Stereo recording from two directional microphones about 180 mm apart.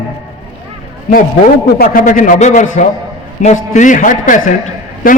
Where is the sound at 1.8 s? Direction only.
50° left (ahead or behind).